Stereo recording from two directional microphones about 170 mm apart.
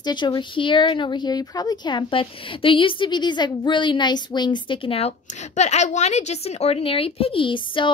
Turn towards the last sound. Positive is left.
turn(degrees=30)  # may be behind; listen again after turning